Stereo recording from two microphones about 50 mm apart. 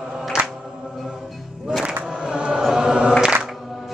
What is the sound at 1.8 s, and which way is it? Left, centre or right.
Choir, centre.